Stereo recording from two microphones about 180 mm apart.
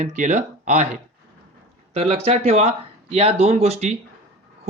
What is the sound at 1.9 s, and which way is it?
Speech, 35° right (ahead or behind).